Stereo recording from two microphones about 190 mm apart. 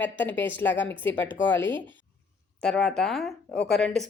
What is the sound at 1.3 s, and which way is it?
Speech, 75° left (ahead or behind).